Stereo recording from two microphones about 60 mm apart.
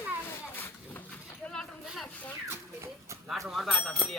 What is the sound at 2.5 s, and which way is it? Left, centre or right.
Speech, right.